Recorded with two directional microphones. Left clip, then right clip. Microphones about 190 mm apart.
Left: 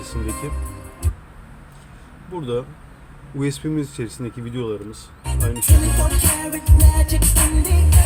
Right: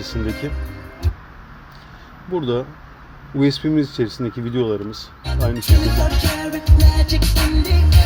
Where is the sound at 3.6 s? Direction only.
35° right (ahead or behind).